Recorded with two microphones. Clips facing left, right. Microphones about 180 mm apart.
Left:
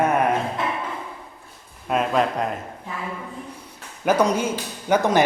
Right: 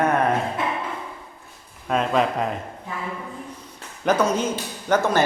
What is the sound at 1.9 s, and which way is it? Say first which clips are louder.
Speech: even; 5° left (ahead or behind).